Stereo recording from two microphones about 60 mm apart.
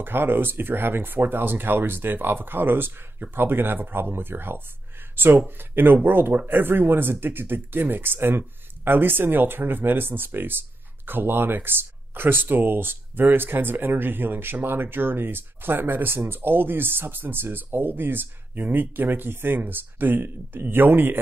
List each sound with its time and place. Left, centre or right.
0.0 s speech: right